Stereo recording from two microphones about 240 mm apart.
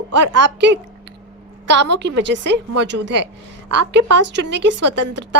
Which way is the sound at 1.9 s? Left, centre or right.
Right.